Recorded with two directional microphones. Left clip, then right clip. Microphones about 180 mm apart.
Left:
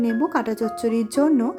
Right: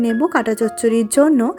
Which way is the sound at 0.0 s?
30° right (ahead or behind).